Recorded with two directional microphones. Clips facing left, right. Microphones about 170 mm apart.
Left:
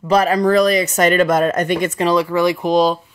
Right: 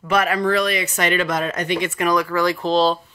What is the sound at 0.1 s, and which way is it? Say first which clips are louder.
Speech: left 5 dB; 35° left (ahead or behind).